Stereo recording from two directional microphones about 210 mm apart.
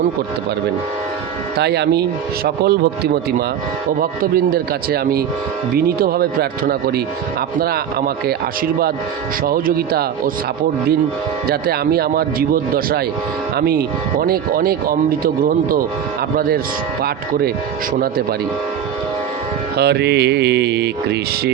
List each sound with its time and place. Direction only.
1.5 s speech: 50° right (ahead or behind)
9.4 s speech: 45° right (ahead or behind)
11.4 s speech: 45° right (ahead or behind)
17.0 s speech: 45° right (ahead or behind)
19.7 s speech: 50° right (ahead or behind)